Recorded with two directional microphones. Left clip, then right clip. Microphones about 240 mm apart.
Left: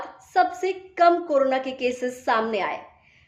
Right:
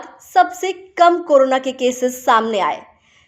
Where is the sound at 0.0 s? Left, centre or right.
Right.